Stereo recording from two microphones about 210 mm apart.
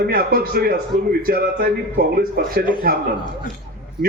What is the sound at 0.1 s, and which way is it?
Speech, 45° right (ahead or behind).